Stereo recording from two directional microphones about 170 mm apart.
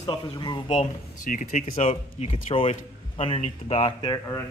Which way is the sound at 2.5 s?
35° left (ahead or behind).